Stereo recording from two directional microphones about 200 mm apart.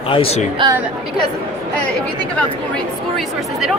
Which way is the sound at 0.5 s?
20° right (ahead or behind).